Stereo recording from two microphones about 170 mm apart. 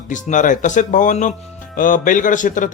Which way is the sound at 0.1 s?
50° left (ahead or behind).